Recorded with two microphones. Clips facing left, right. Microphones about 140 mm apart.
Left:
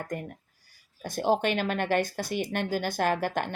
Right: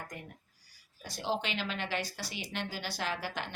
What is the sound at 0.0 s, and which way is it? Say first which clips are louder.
Speech: left 10 dB; 50° left (ahead or behind).